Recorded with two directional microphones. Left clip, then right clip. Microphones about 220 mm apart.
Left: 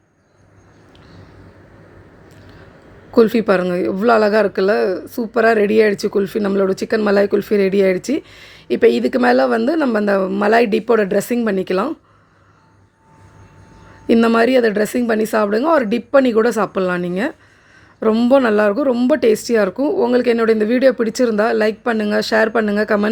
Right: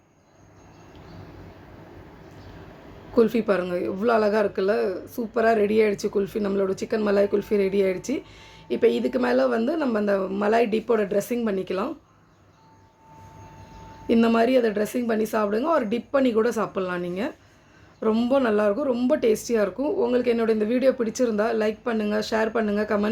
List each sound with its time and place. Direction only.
3.2 s a man's voice: 35° left (ahead or behind)
14.1 s a man's voice: 35° left (ahead or behind)